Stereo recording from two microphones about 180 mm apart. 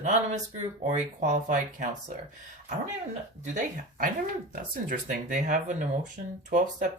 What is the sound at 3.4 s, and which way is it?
Speech, 45° right (ahead or behind).